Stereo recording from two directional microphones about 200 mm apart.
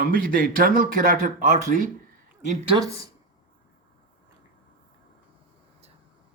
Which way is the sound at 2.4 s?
25° right (ahead or behind).